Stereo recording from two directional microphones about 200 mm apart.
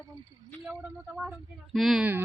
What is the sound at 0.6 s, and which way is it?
Speech, 5° right (ahead or behind).